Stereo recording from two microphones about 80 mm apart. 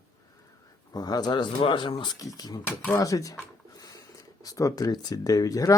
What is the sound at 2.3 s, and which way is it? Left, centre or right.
Speech, left.